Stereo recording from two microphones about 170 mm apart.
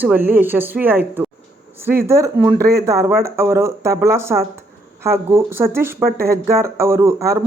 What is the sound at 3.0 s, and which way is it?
Speech, 15° right (ahead or behind).